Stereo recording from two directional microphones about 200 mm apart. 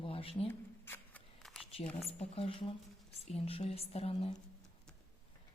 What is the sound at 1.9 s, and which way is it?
Speech, 5° left (ahead or behind).